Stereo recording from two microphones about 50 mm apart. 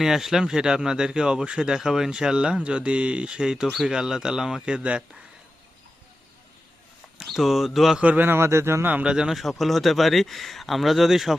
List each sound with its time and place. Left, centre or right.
0.0 s speech: centre
7.3 s speech: centre
8.0 s a man's voice: right
8.3 s speech: right
8.8 s a man's voice: right
9.0 s speech: centre
9.3 s speech: centre